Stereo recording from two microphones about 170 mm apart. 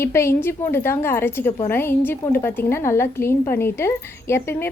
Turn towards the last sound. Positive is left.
turn(degrees=15)  # may be behind; listen again after turning